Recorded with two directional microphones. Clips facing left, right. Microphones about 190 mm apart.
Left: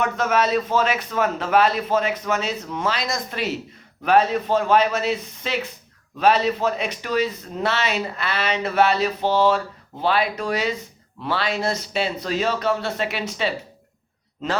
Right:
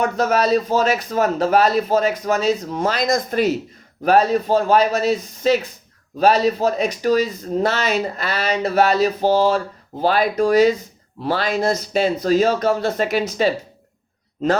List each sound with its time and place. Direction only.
0.0 s a man's voice: 35° right (ahead or behind)